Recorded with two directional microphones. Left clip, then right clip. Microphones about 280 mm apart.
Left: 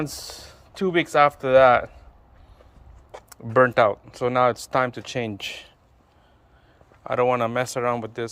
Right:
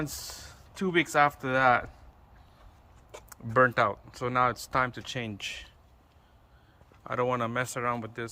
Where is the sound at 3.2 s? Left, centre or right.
Centre.